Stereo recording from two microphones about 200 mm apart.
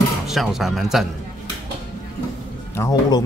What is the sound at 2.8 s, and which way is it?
Music, 20° left (ahead or behind).